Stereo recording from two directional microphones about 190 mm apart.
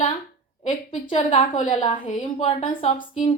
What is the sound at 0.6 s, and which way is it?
A woman's voice, 35° left (ahead or behind).